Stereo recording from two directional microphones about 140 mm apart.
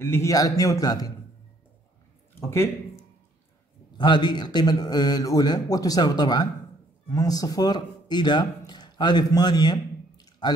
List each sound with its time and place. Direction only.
0.0 s a man's voice: 20° left (ahead or behind)
4.0 s a man's voice: 30° left (ahead or behind)